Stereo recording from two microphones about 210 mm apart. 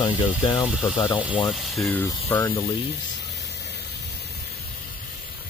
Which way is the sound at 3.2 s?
55° left (ahead or behind).